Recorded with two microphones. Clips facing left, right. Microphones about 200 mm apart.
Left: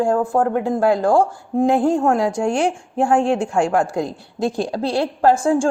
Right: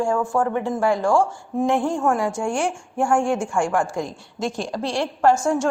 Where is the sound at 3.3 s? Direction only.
65° left (ahead or behind).